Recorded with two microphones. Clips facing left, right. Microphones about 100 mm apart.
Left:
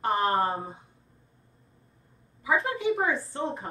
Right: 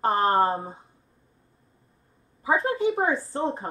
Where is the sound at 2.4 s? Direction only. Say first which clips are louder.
Right 3 dB; 30° right (ahead or behind).